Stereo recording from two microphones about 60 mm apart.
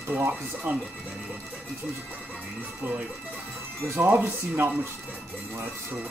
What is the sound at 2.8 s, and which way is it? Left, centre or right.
Speech, right.